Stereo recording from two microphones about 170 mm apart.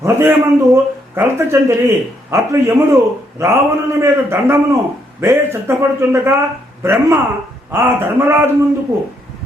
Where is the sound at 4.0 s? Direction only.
15° right (ahead or behind).